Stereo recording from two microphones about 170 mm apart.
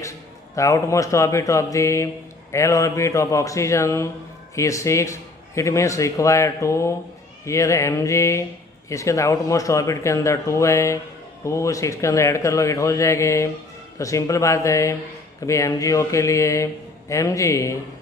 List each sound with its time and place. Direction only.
0.6 s speech: 20° left (ahead or behind)